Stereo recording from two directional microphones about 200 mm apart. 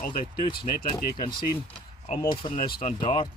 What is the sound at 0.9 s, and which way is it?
Speech, 20° left (ahead or behind).